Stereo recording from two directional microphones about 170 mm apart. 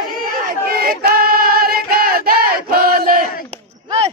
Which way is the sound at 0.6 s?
60° right (ahead or behind).